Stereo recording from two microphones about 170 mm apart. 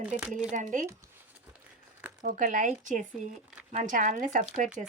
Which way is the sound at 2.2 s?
50° right (ahead or behind).